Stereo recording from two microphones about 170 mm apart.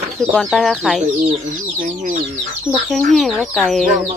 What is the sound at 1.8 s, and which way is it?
Speech, 55° right (ahead or behind).